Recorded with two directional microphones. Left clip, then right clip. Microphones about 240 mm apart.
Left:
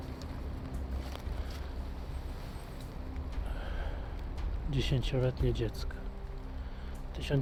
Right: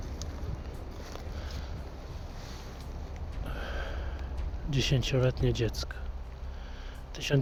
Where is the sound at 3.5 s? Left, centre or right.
Centre.